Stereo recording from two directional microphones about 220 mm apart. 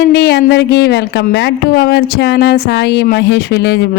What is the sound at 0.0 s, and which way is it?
Speech, 50° left (ahead or behind).